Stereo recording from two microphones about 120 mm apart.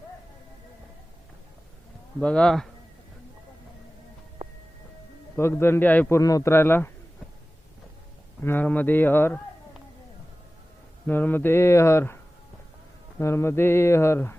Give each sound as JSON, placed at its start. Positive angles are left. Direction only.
{"t": 2.2, "sound": "speech", "side_deg": 10}
{"t": 5.4, "sound": "a man's voice", "side_deg": 20}
{"t": 8.4, "sound": "speech", "side_deg": 15}
{"t": 11.0, "sound": "a man's voice", "side_deg": 15}